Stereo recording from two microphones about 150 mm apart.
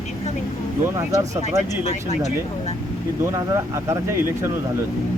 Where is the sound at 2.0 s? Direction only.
50° left (ahead or behind).